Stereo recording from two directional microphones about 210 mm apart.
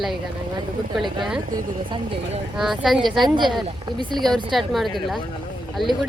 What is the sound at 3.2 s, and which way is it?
Speech, 20° right (ahead or behind).